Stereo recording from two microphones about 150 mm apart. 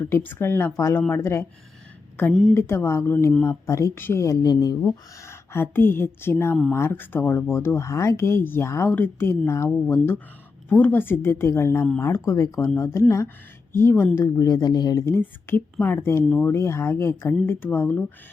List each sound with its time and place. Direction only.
0.0 s speech: 15° left (ahead or behind)
2.6 s speech: 15° left (ahead or behind)
9.6 s speech: centre (ahead or behind)
10.7 s speech: 10° left (ahead or behind)